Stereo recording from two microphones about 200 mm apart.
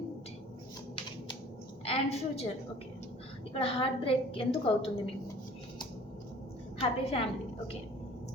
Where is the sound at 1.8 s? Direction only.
30° left (ahead or behind).